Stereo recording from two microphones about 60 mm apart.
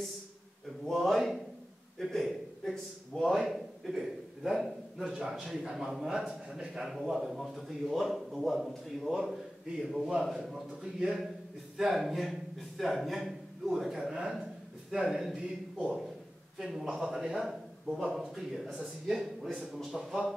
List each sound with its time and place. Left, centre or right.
0.8 s a man's voice: centre
16.5 s a man's voice: centre